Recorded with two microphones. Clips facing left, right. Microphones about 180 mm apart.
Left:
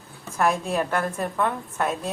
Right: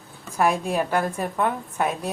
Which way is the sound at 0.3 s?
10° right (ahead or behind).